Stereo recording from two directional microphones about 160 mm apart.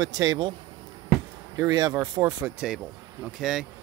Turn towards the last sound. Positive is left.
turn(degrees=-5)  # may be behind; listen again after turning